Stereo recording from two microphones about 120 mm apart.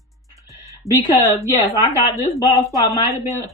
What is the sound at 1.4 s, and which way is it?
A woman's voice, 25° left (ahead or behind).